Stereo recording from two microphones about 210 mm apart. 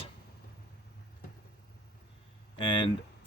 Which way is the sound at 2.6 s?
25° left (ahead or behind).